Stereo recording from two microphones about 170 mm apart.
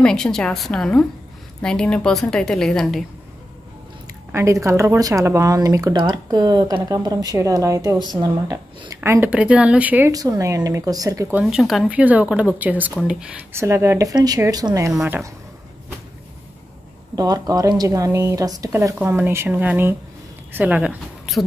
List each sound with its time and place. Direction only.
0.0 s a woman's voice: 5° left (ahead or behind)
4.3 s speech: 15° right (ahead or behind)
10.1 s speech: 20° right (ahead or behind)
11.4 s speech: centre (ahead or behind); by 15.0 s 20° right (ahead or behind)
15.0 s a woman's voice: 5° right (ahead or behind)
17.1 s speech: 20° right (ahead or behind); by 21.5 s 5° right (ahead or behind)